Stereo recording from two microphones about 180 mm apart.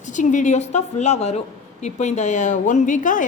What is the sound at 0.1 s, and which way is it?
A woman's voice, 45° left (ahead or behind).